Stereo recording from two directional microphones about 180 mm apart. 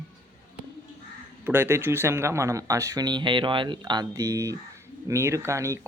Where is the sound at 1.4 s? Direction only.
10° right (ahead or behind).